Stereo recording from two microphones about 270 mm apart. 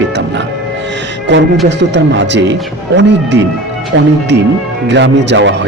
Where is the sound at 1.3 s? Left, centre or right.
Right.